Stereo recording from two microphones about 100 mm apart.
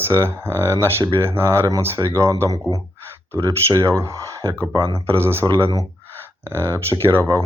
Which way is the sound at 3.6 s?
30° right (ahead or behind).